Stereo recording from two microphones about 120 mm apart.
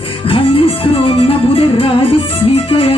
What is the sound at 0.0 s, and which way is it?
Music, 50° left (ahead or behind).